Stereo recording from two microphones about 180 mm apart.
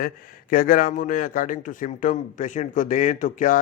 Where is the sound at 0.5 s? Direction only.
50° left (ahead or behind).